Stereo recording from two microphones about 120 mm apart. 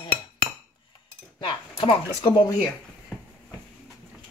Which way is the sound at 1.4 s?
50° left (ahead or behind).